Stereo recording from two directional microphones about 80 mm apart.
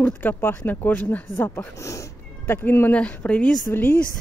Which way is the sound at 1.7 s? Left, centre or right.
Left.